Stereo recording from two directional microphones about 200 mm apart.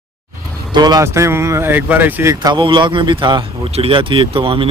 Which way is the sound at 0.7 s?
20° right (ahead or behind).